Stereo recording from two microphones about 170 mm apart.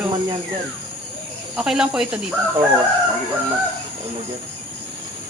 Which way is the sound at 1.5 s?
5° right (ahead or behind).